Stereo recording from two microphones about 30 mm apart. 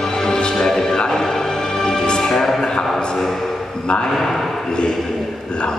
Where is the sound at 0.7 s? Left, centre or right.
Centre.